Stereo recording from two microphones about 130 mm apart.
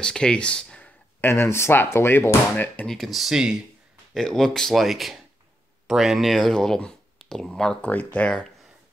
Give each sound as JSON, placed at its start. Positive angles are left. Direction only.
{"t": 0.0, "sound": "speech", "side_deg": 5}
{"t": 1.2, "sound": "speech", "side_deg": 20}
{"t": 2.9, "sound": "speech", "side_deg": 0}